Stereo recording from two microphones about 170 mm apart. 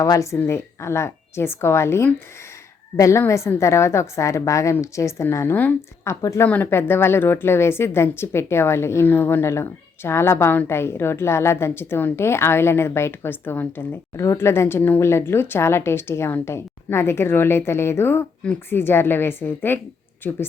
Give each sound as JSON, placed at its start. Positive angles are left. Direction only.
{"t": 0.0, "sound": "a woman's voice", "side_deg": 20}